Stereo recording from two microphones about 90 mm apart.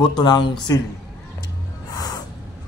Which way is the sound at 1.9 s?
45° left (ahead or behind).